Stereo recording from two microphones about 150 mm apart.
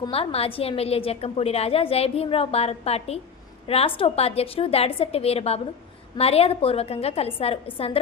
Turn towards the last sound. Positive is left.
turn(degrees=40)  # may be behind; listen again after turning